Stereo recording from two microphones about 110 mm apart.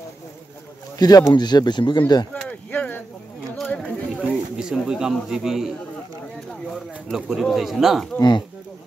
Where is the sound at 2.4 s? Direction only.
15° left (ahead or behind).